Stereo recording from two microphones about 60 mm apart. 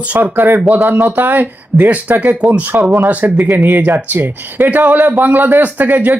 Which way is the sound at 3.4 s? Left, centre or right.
Right.